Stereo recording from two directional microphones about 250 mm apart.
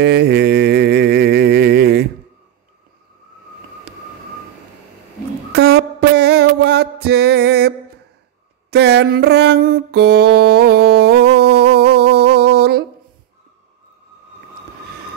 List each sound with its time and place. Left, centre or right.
0.0 s mantra: right
5.5 s music: right
8.6 s a sound: right